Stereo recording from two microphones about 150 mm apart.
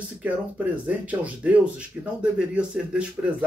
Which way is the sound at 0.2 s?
10° right (ahead or behind).